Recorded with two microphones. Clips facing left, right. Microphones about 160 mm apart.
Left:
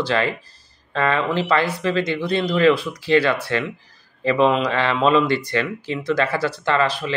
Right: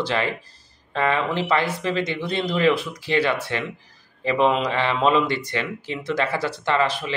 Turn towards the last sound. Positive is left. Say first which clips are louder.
# left 2 dB
turn(degrees=-20)  # may be behind; listen again after turning